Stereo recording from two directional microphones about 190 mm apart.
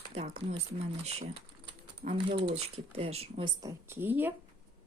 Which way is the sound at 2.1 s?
25° right (ahead or behind).